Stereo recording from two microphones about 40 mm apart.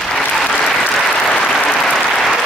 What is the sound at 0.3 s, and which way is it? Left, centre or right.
Applause, centre.